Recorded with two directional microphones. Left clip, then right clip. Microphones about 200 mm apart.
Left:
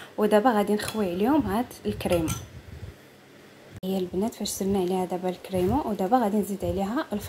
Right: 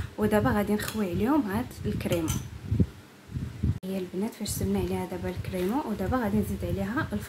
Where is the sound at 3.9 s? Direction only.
25° left (ahead or behind).